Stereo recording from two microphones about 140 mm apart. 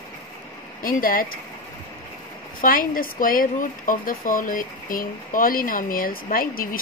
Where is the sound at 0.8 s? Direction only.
90° left.